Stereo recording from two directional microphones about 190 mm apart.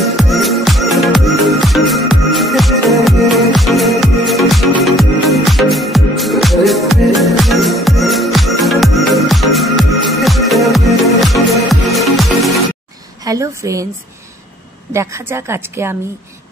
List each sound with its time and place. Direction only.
0.0 s music: centre (ahead or behind)
13.2 s a sound: 15° right (ahead or behind)
14.9 s a woman's voice: 15° right (ahead or behind)